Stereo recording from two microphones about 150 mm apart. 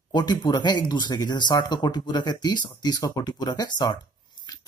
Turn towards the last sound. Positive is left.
turn(degrees=30)  # may be behind; listen again after turning